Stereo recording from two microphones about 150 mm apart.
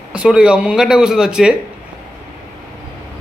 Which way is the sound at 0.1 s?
5° right (ahead or behind).